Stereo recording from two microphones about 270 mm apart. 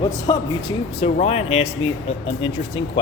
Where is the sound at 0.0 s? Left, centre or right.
Centre.